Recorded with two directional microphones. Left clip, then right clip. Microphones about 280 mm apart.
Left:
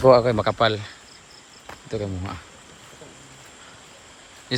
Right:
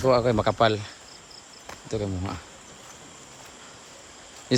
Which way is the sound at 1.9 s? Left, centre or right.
Centre.